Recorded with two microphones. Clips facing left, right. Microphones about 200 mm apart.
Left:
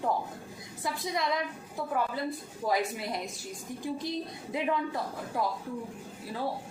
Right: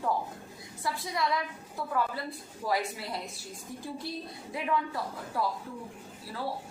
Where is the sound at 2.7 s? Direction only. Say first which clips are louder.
Left 2 dB; 20° left (ahead or behind).